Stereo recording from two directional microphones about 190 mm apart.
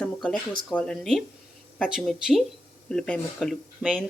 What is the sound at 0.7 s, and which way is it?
Speech, 5° left (ahead or behind).